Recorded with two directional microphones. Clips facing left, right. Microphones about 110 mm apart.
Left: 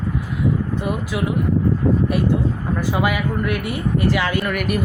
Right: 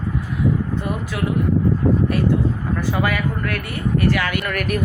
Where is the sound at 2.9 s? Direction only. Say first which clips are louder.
Left 1 dB; 15° left (ahead or behind).